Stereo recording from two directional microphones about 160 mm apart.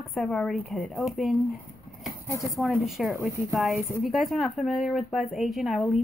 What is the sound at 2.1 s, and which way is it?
Speech, 20° left (ahead or behind).